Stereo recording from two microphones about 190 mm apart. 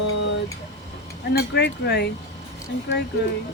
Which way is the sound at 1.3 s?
60° left (ahead or behind).